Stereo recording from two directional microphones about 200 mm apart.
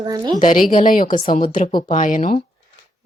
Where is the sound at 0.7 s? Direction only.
40° left (ahead or behind).